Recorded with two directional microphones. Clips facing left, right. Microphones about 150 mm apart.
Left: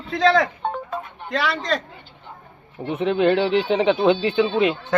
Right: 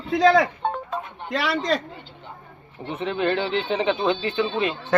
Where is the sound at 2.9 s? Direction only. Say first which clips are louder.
Left 5 dB; 60° left (ahead or behind).